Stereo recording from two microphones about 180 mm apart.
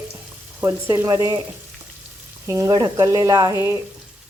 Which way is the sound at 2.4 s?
20° right (ahead or behind).